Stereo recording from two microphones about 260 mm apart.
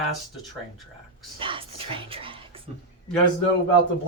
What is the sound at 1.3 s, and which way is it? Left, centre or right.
Speech, centre.